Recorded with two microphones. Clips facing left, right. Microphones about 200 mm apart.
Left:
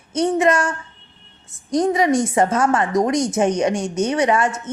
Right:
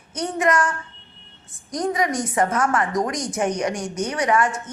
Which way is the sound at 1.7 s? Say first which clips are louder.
Left 6 dB; 25° left (ahead or behind).